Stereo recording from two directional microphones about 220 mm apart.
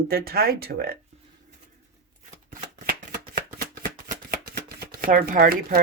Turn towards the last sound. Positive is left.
turn(degrees=-45)  # may be behind; listen again after turning